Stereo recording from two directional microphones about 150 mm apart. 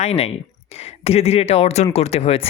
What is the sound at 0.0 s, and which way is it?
Speech, 45° left (ahead or behind).